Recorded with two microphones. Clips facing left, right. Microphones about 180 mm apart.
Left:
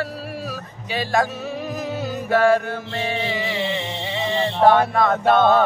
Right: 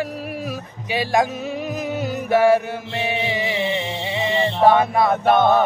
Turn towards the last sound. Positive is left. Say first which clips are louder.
# even
turn(degrees=-15)  # may be behind; listen again after turning